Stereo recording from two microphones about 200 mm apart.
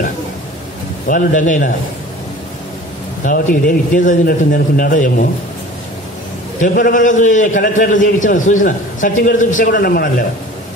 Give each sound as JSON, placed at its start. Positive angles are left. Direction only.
{"t": 1.0, "sound": "a man's voice", "side_deg": 40}
{"t": 3.3, "sound": "a man's voice", "side_deg": 45}
{"t": 6.6, "sound": "a man's voice", "side_deg": 45}